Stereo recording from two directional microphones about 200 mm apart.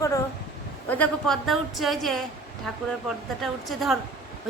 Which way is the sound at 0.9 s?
5° left (ahead or behind).